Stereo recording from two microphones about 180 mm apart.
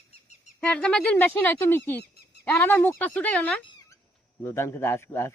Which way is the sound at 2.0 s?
65° left (ahead or behind).